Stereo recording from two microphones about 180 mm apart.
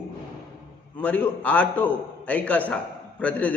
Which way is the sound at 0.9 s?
10° left (ahead or behind).